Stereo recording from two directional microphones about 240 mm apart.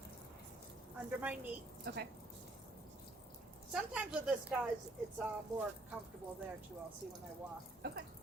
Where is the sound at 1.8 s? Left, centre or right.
Right.